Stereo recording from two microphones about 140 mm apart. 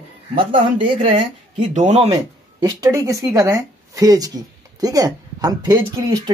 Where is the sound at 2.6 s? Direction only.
25° right (ahead or behind).